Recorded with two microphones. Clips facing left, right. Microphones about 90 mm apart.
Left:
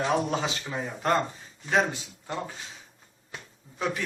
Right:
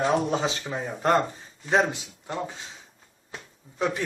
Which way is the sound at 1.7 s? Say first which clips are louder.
Right 2 dB; 20° right (ahead or behind).